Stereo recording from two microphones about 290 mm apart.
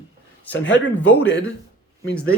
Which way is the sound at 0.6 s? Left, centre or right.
Left.